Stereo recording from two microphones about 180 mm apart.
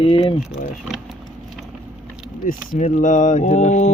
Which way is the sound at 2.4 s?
50° left (ahead or behind).